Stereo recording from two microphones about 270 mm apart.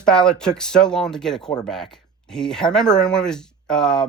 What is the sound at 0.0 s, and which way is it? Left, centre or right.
Speech, centre.